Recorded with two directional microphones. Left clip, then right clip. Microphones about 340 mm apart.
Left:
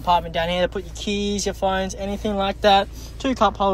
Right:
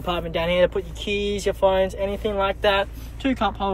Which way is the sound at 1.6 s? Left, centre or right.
Left.